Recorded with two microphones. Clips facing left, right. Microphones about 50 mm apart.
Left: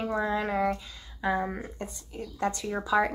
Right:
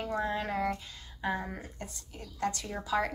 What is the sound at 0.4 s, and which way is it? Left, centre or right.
Speech, left.